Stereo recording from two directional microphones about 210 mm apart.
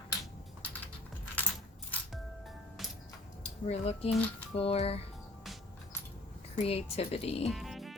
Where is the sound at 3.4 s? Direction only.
30° left (ahead or behind).